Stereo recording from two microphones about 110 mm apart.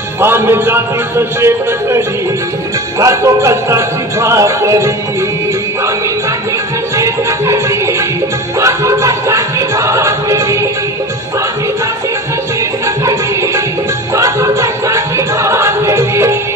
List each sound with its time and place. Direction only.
0.2 s speech: 20° right (ahead or behind)
7.0 s music: 25° right (ahead or behind)
14.1 s music: 30° right (ahead or behind)